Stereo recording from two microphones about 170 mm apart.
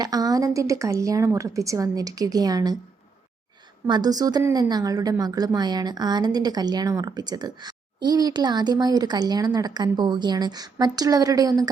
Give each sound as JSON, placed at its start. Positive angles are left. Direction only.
{"t": 0.0, "sound": "a woman's voice", "side_deg": -20}
{"t": 3.8, "sound": "a woman's voice", "side_deg": -25}